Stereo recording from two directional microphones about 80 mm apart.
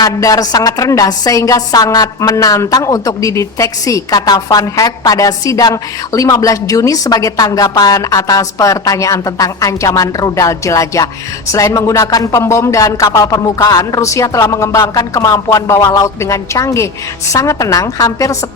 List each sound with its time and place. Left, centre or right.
0.0 s a woman's voice: left